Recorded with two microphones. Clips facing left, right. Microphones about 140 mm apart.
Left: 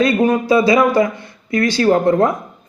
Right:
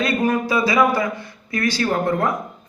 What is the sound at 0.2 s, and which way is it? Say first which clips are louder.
A woman's voice: left 6 dB; 25° left (ahead or behind).